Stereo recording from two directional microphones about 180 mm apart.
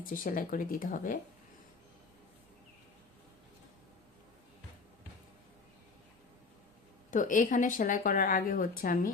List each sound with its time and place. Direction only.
0.0 s speech: 50° left (ahead or behind)
7.1 s speech: 45° left (ahead or behind)